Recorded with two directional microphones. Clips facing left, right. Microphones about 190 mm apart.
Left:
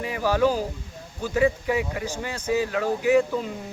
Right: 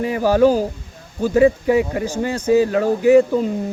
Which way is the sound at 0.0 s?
40° right (ahead or behind).